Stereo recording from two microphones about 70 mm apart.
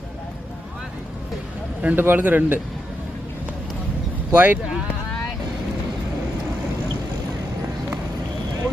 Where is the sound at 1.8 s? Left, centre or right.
Right.